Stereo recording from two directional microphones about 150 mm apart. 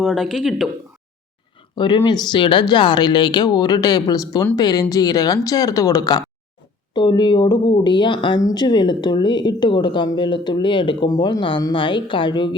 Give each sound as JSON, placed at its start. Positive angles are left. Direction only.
{"t": 0.0, "sound": "speech", "side_deg": 0}
{"t": 1.7, "sound": "a woman's voice", "side_deg": 30}